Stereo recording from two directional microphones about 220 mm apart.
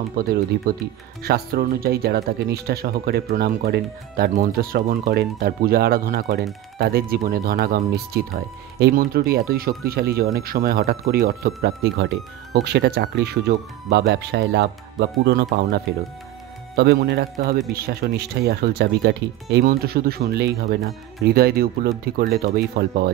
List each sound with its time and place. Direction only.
0.2 s speech: 45° right (ahead or behind)